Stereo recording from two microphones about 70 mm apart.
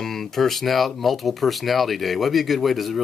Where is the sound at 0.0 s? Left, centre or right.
Centre.